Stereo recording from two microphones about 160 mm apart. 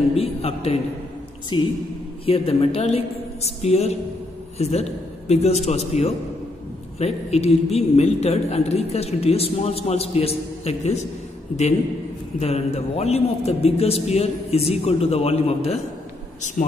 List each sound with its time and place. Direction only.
0.1 s a woman's voice: 40° left (ahead or behind)
3.4 s music: 45° left (ahead or behind)
4.6 s a woman's voice: 40° left (ahead or behind)
5.3 s music: 45° left (ahead or behind)
5.7 s a woman's voice: 40° left (ahead or behind)
12.4 s a woman's voice: 40° left (ahead or behind)